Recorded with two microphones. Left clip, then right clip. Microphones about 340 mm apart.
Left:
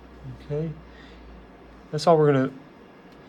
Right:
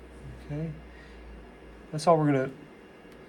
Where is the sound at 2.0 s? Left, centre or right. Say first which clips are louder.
Left 5 dB; left.